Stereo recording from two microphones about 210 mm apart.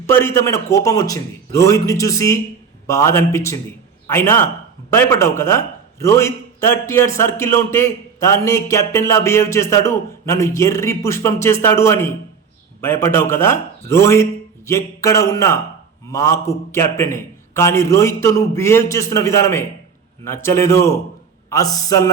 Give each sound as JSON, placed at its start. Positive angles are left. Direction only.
{"t": 0.1, "sound": "a man's voice", "side_deg": 10}